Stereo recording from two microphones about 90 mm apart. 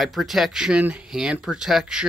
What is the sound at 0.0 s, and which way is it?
Speech, centre (ahead or behind).